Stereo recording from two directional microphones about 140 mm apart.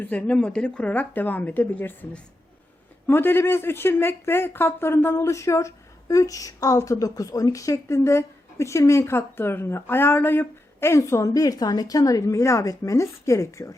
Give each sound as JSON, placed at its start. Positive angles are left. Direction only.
{"t": 0.0, "sound": "speech", "side_deg": 10}